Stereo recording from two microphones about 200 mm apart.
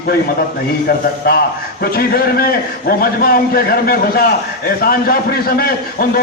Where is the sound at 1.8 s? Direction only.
50° left (ahead or behind).